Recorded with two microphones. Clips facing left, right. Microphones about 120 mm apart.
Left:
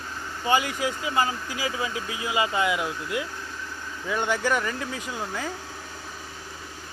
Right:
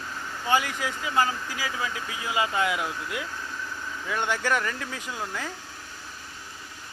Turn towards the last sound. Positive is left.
turn(degrees=5)  # may be behind; listen again after turning